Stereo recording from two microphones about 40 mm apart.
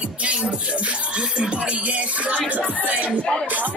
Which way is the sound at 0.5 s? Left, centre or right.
Right.